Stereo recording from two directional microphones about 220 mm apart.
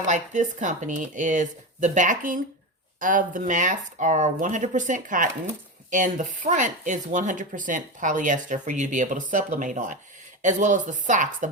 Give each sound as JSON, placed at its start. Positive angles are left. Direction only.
{"t": 0.1, "sound": "speech", "side_deg": -35}